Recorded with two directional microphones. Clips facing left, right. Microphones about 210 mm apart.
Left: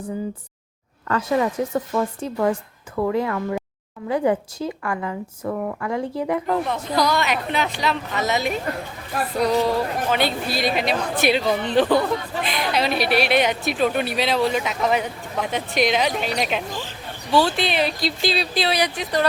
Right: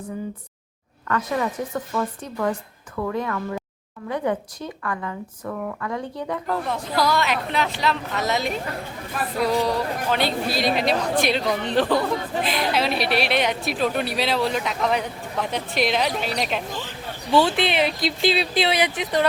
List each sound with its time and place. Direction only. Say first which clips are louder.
1.0 s speech: left 3 dB; 25° left (ahead or behind)
6.7 s a woman's voice: left 1 dB; centre (ahead or behind)
9.6 s a woman's voice: left 2 dB; centre (ahead or behind)
17.3 s speech: even; 20° right (ahead or behind)